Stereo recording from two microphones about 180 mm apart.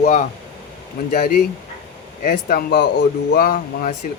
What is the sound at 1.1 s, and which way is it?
Speech, 55° left (ahead or behind).